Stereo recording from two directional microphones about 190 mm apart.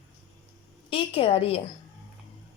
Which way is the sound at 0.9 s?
30° left (ahead or behind).